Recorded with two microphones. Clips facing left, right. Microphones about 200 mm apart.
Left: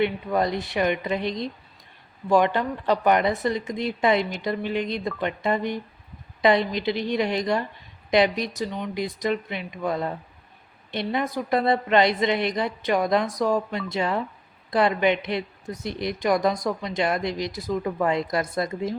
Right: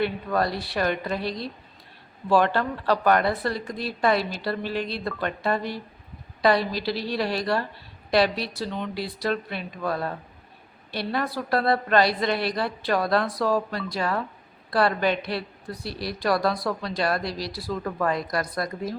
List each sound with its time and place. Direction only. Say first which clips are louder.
0.0 s speech: left 2 dB; 20° left (ahead or behind)